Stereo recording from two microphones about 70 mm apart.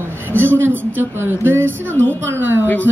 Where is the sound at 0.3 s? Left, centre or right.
Right.